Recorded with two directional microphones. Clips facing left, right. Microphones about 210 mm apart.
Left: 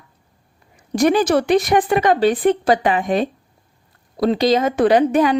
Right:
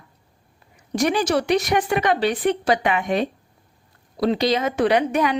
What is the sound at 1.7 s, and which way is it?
Speech, 35° left (ahead or behind).